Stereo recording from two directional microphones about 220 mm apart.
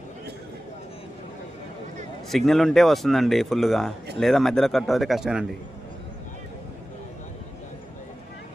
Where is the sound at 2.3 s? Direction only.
Centre (ahead or behind).